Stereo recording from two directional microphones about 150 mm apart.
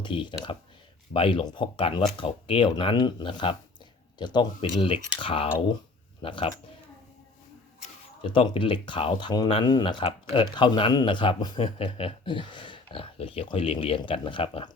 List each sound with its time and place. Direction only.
0.0 s speech: 35° left (ahead or behind)
8.2 s speech: 35° left (ahead or behind)